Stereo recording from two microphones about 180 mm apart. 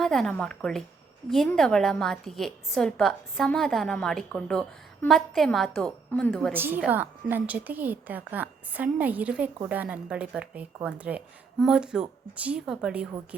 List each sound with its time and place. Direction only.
0.0 s a woman's voice: 5° left (ahead or behind)
6.5 s a woman's voice: 10° right (ahead or behind)